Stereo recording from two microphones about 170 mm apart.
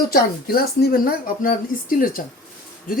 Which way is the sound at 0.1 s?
60° left (ahead or behind).